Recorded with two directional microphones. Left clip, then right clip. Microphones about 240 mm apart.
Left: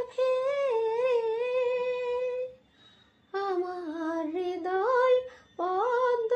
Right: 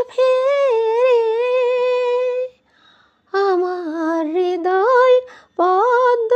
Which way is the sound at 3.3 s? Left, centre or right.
Right.